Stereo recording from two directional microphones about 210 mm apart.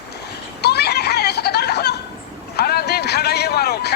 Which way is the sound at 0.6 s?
50° left (ahead or behind).